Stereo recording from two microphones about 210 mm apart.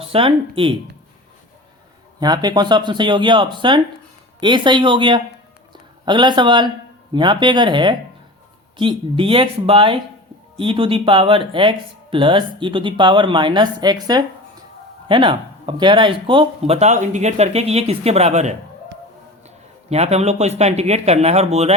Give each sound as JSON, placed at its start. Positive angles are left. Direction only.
{"t": 0.0, "sound": "speech", "side_deg": -25}
{"t": 2.2, "sound": "speech", "side_deg": -20}
{"t": 19.9, "sound": "speech", "side_deg": -30}